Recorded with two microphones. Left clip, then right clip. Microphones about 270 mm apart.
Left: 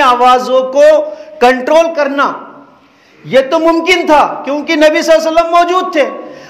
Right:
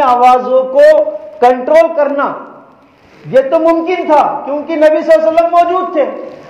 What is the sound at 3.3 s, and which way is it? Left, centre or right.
A man's voice, left.